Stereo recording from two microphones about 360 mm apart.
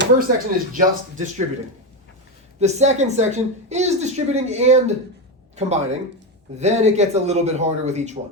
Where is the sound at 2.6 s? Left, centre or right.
Centre.